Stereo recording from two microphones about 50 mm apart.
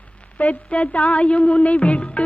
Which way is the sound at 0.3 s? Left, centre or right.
Left.